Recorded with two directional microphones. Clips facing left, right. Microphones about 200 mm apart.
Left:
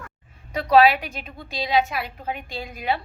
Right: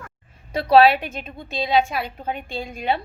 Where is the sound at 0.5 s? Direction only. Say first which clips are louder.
Right 2 dB; 30° right (ahead or behind).